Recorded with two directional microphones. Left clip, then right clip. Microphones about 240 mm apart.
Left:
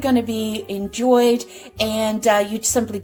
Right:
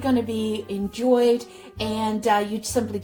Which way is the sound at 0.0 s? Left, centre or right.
Left.